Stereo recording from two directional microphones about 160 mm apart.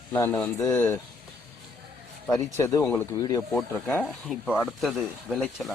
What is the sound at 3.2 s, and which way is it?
Speech, 25° left (ahead or behind).